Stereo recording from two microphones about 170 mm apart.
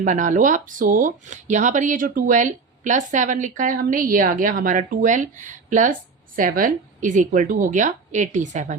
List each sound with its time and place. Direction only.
0.0 s speech: 50° right (ahead or behind)